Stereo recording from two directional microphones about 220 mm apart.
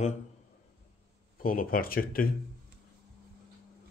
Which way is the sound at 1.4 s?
40° left (ahead or behind).